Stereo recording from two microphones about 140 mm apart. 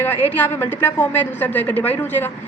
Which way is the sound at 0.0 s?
15° left (ahead or behind).